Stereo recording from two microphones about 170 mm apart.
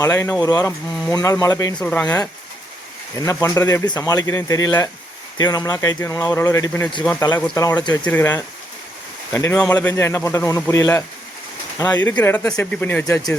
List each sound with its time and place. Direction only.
0.0 s speech: 15° left (ahead or behind)
1.9 s speech: 10° left (ahead or behind)
3.2 s speech: 20° left (ahead or behind)
8.0 s speech: 10° left (ahead or behind)
12.0 s speech: 10° left (ahead or behind)